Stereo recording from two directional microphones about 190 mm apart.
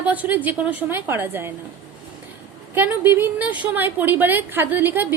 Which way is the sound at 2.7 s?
10° right (ahead or behind).